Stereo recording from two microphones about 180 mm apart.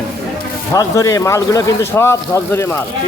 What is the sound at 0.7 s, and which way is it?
A man's voice, 20° left (ahead or behind).